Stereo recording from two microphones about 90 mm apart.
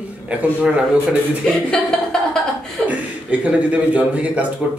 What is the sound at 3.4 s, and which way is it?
A man's voice, 15° right (ahead or behind).